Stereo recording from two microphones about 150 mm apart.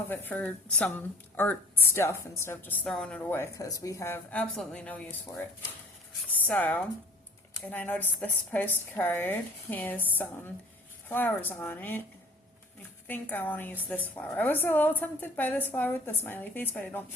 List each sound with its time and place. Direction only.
0.1 s a woman's voice: 15° left (ahead or behind)
5.3 s a woman's voice: 15° left (ahead or behind)
13.1 s a woman's voice: 10° left (ahead or behind)